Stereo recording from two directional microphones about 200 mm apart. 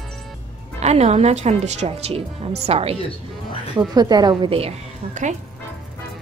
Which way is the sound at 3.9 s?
20° right (ahead or behind).